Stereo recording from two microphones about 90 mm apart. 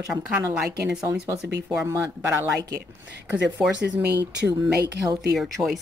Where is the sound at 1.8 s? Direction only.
35° right (ahead or behind).